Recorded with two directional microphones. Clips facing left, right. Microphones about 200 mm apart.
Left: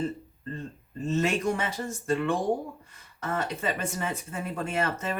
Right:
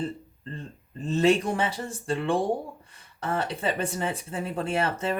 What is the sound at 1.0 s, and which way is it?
Speech, 35° right (ahead or behind).